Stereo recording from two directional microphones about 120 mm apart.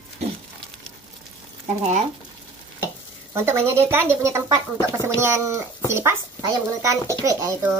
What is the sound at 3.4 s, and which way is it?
A child's voice, 20° right (ahead or behind).